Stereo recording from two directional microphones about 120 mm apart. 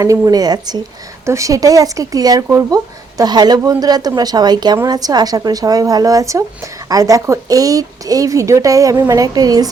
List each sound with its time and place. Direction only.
0.0 s a woman's voice: 30° right (ahead or behind)